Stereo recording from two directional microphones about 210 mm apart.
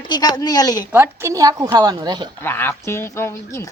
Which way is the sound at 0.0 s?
20° left (ahead or behind).